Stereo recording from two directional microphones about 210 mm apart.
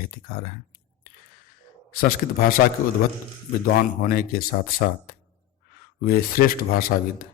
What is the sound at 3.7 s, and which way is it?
A man's voice, 45° left (ahead or behind).